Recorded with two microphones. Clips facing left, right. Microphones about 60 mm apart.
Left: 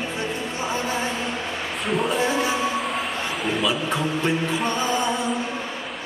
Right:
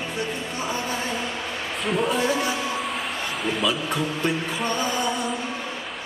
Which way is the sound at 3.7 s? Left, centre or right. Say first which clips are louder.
Left 1 dB; centre.